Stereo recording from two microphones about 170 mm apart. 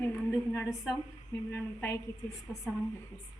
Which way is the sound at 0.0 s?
10° left (ahead or behind).